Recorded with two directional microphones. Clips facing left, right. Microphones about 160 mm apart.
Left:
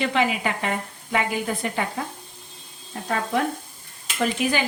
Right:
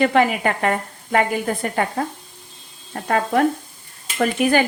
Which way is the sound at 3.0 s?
60° right (ahead or behind).